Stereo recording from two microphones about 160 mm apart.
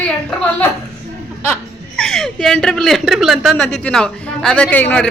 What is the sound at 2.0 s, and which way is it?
A man's voice, 5° left (ahead or behind).